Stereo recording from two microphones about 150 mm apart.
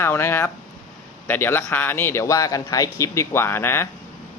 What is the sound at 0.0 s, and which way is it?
A man's voice, 15° left (ahead or behind).